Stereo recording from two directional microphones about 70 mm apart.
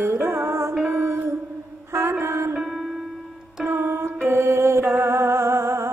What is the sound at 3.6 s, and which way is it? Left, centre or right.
Mantra, right.